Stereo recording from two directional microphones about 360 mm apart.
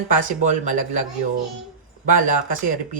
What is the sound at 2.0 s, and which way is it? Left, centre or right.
Speech, right.